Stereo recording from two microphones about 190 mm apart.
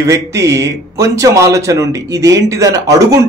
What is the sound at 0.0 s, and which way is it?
Speech, 15° right (ahead or behind).